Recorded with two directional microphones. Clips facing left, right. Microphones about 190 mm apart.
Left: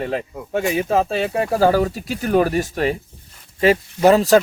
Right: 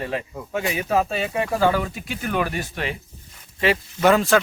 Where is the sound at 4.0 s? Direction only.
35° left (ahead or behind).